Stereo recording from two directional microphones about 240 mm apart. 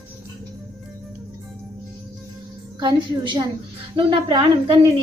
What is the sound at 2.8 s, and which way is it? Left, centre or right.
A woman's voice, centre.